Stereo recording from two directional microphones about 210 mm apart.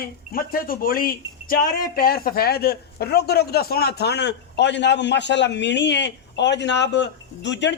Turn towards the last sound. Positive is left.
turn(degrees=55)  # may be behind; listen again after turning